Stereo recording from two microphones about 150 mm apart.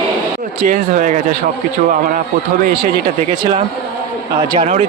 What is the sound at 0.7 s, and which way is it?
Speech, 55° right (ahead or behind).